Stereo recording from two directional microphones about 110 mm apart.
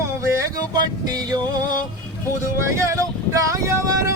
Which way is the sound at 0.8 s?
40° right (ahead or behind).